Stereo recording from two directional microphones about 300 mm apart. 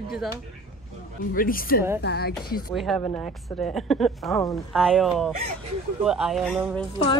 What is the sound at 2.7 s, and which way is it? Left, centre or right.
Speech, centre.